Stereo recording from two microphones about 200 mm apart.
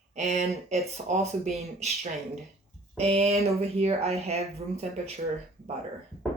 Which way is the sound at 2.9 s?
30° right (ahead or behind).